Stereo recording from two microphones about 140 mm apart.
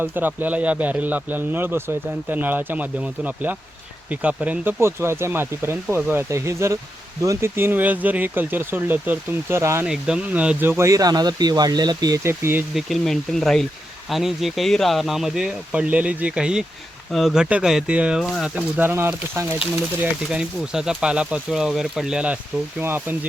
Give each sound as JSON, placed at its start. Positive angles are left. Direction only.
{"t": 0.0, "sound": "a man's voice", "side_deg": -15}
{"t": 9.8, "sound": "speech", "side_deg": -5}
{"t": 12.7, "sound": "a man's voice", "side_deg": 0}